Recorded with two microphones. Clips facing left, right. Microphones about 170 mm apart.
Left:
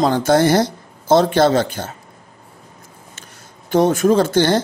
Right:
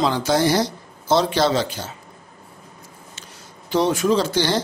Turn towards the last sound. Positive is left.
turn(degrees=50)  # may be behind; listen again after turning